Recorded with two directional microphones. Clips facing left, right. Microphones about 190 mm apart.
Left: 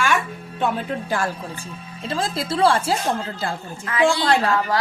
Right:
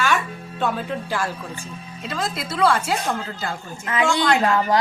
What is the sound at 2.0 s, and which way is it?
Speech, 30° left (ahead or behind).